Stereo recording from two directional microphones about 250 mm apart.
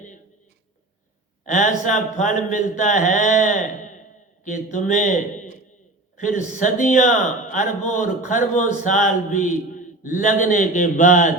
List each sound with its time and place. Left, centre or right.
1.5 s a man's voice: left